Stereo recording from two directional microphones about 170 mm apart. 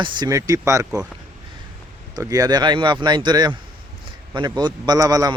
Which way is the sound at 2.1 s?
20° right (ahead or behind).